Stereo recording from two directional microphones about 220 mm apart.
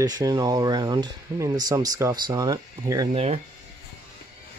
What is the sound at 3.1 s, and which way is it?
Speech, 30° right (ahead or behind).